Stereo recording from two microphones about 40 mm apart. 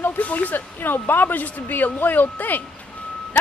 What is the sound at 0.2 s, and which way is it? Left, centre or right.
Speech, left.